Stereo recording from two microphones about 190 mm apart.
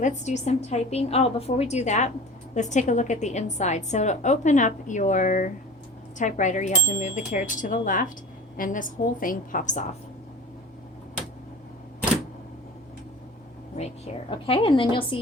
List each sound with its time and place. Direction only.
0.0 s a woman's voice: 40° left (ahead or behind)
13.7 s a woman's voice: 35° left (ahead or behind)